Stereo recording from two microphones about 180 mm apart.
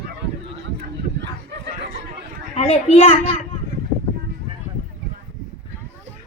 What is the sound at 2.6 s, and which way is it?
Speech, 35° left (ahead or behind).